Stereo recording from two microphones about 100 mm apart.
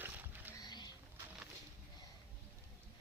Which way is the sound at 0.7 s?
45° left (ahead or behind).